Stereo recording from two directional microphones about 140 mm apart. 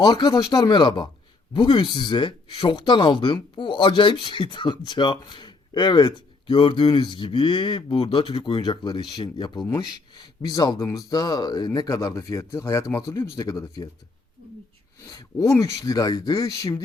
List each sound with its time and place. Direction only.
0.0 s speech: 30° left (ahead or behind)
15.0 s speech: 25° left (ahead or behind)